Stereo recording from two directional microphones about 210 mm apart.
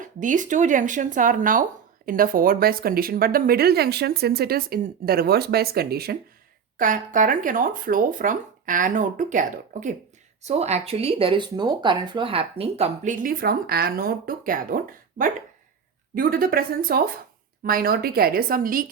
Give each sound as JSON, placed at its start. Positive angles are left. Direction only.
{"t": 0.0, "sound": "speech", "side_deg": -40}
{"t": 16.1, "sound": "speech", "side_deg": -45}